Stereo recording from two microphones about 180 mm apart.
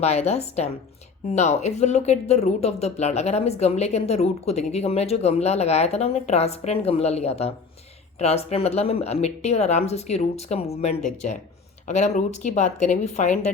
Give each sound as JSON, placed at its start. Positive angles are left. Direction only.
{"t": 0.0, "sound": "speech", "side_deg": 35}